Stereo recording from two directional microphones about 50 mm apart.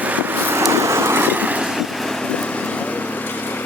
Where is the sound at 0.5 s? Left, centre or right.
Right.